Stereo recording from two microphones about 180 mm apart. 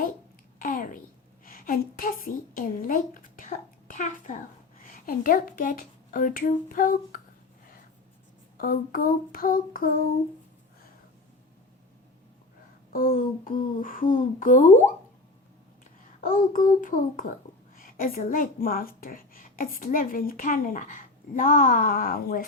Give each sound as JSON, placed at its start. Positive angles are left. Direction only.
{"t": 0.6, "sound": "a sound", "side_deg": 50}
{"t": 1.5, "sound": "a woman's voice", "side_deg": 55}
{"t": 8.5, "sound": "a woman's voice", "side_deg": 50}
{"t": 12.9, "sound": "a woman's voice", "side_deg": 50}
{"t": 16.2, "sound": "a woman's voice", "side_deg": 50}